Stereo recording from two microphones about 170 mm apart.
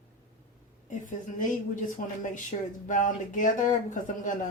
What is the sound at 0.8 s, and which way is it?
Speech, 50° left (ahead or behind).